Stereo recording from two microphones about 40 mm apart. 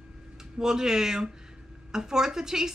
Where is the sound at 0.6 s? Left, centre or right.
Centre.